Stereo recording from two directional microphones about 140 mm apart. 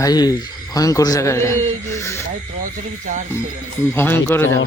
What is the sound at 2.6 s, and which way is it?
Speech, 65° right (ahead or behind).